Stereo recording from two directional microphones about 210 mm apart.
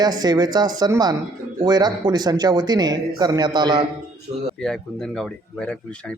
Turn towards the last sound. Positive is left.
turn(degrees=5)  # may be behind; listen again after turning